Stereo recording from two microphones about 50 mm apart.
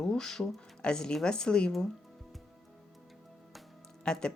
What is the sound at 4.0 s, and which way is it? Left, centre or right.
Speech, centre.